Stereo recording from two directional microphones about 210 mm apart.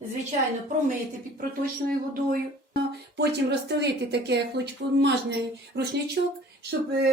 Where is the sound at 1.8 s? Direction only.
40° right (ahead or behind).